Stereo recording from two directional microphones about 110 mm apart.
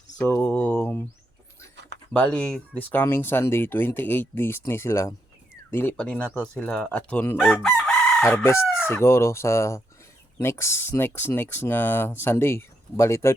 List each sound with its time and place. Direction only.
0.2 s mantra: 10° left (ahead or behind)
2.1 s speech: 10° left (ahead or behind); by 5.1 s 25° left (ahead or behind)
6.0 s chicken: 10° left (ahead or behind)
8.2 s speech: 25° left (ahead or behind)